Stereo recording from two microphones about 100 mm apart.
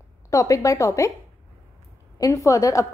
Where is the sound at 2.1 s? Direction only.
35° left (ahead or behind).